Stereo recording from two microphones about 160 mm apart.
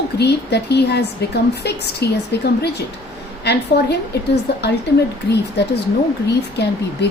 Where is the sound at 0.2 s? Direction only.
90° left.